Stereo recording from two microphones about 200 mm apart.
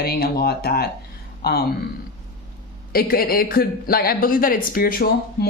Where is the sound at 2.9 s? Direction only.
50° left (ahead or behind).